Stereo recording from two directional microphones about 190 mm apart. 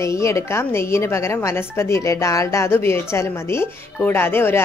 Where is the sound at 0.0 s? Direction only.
15° left (ahead or behind).